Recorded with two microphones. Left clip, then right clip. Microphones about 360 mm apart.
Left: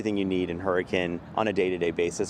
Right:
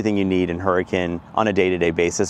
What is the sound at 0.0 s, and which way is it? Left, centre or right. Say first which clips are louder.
Speech: right 7 dB; right.